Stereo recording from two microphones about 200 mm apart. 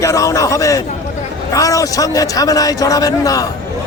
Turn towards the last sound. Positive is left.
turn(degrees=20)  # may be behind; listen again after turning